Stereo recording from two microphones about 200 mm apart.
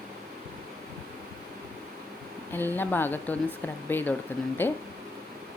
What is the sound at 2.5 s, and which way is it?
A woman's voice, 10° left (ahead or behind).